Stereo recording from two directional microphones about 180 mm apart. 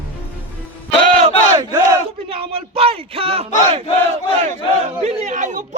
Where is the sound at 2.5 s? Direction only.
35° right (ahead or behind).